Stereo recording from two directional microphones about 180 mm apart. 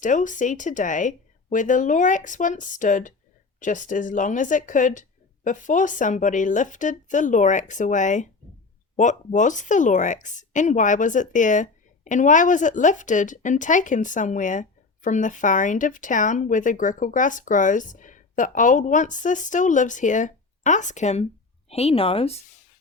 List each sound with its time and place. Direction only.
0.0 s speech: 45° left (ahead or behind)